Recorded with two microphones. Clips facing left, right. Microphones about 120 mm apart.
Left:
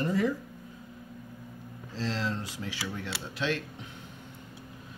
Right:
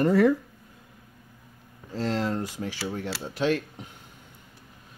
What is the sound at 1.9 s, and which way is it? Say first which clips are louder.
Speech: right 5 dB; 50° right (ahead or behind).